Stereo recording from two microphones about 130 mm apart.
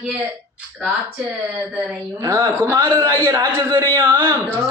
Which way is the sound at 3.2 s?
30° right (ahead or behind).